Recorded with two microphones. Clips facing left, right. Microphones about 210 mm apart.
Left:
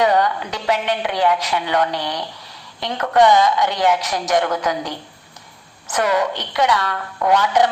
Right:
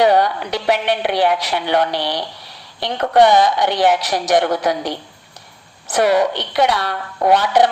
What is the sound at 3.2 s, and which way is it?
Speech, 65° right (ahead or behind).